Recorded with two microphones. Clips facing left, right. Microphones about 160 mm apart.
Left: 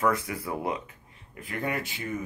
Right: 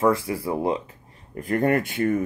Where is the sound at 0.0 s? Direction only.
30° right (ahead or behind).